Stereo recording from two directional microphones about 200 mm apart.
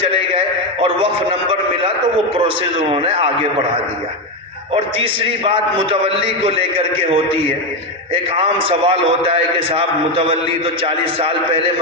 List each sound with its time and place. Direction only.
0.1 s a man's voice: 25° right (ahead or behind)
4.7 s a man's voice: 25° right (ahead or behind)